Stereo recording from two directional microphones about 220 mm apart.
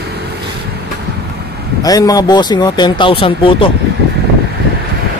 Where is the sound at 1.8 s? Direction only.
15° left (ahead or behind).